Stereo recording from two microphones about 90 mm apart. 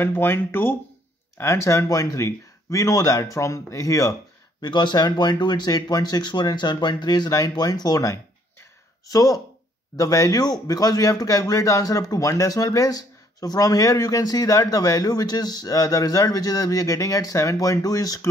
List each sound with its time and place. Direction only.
0.0 s speech: 25° left (ahead or behind)
4.6 s speech: 55° left (ahead or behind)